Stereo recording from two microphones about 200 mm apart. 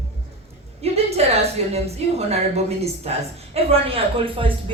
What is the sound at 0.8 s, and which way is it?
A woman's voice, 30° right (ahead or behind).